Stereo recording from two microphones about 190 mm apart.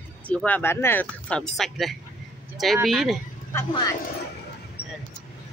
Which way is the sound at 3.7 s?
20° left (ahead or behind).